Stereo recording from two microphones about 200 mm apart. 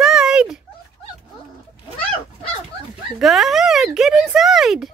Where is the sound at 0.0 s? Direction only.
5° right (ahead or behind).